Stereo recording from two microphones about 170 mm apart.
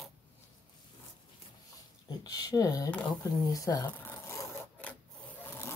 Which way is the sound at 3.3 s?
20° left (ahead or behind).